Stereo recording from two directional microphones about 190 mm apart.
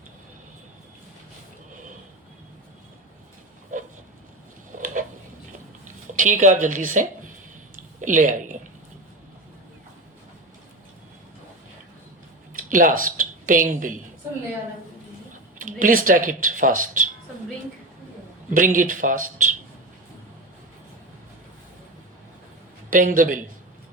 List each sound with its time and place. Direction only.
4.7 s a sound: 45° right (ahead or behind)
6.1 s speech: 45° right (ahead or behind)
7.8 s a sound: 45° right (ahead or behind)
12.5 s speech: 45° right (ahead or behind)
15.5 s speech: 45° right (ahead or behind)
18.5 s speech: 45° right (ahead or behind)
22.9 s speech: 45° right (ahead or behind)